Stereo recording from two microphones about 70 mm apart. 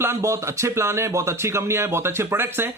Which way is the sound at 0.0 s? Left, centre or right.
Right.